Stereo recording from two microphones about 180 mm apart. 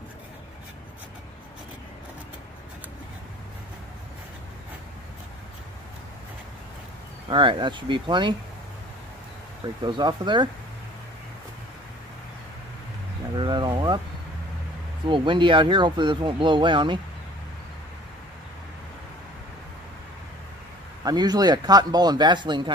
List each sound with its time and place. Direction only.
7.2 s speech: 25° right (ahead or behind)
9.8 s speech: 25° right (ahead or behind)
13.4 s a sound: 25° right (ahead or behind)
15.0 s speech: 25° right (ahead or behind)
21.0 s speech: 20° right (ahead or behind)